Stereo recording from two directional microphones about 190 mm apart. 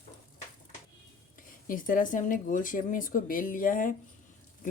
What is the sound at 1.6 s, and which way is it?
Speech, 45° left (ahead or behind).